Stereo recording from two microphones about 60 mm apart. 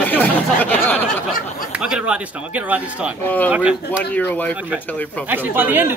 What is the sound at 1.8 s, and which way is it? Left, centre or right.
Speech, centre.